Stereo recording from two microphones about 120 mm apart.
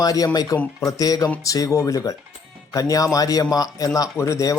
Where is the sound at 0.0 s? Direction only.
30° left (ahead or behind).